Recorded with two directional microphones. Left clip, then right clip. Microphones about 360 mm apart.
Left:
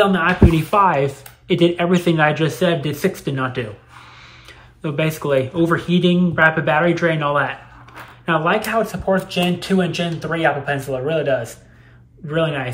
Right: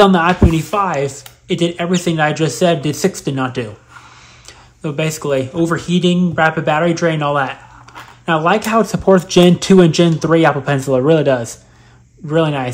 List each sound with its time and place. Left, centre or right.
0.0 s speech: centre
4.8 s speech: centre